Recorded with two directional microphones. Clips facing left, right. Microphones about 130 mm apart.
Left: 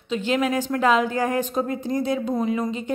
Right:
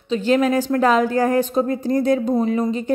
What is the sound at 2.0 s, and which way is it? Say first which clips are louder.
Speech: right 6 dB; 45° right (ahead or behind).